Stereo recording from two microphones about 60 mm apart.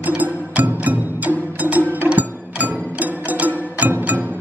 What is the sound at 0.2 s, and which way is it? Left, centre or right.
Music, right.